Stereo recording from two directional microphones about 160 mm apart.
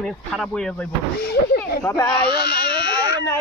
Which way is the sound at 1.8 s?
20° left (ahead or behind).